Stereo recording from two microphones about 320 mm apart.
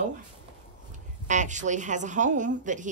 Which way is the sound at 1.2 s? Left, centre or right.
Right.